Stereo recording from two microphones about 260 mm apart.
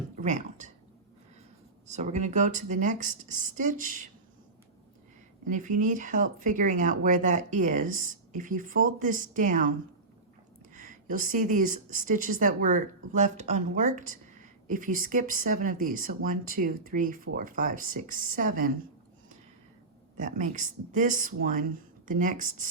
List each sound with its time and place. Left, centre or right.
0.2 s a sound: right
1.9 s speech: right
5.5 s speech: right
10.8 s speech: right
20.1 s speech: right